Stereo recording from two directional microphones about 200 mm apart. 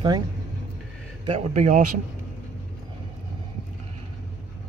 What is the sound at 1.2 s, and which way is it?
Speech, 30° right (ahead or behind).